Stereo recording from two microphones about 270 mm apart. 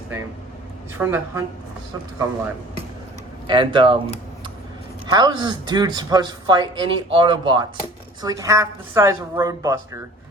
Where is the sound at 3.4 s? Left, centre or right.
Centre.